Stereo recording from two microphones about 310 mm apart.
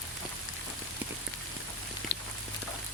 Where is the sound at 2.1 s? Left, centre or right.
Left.